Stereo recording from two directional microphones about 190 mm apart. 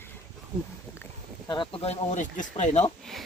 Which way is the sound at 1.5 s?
25° left (ahead or behind).